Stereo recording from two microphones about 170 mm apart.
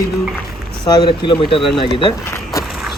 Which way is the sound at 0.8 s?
25° left (ahead or behind).